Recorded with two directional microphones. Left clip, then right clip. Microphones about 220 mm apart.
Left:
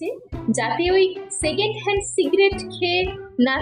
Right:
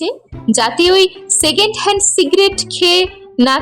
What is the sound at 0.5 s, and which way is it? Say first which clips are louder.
A woman's voice: right 8 dB; 30° right (ahead or behind).